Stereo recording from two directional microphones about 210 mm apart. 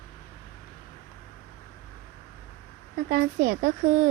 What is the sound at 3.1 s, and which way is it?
Speech, 45° right (ahead or behind).